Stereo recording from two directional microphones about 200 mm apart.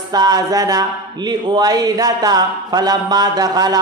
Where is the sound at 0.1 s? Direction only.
20° right (ahead or behind).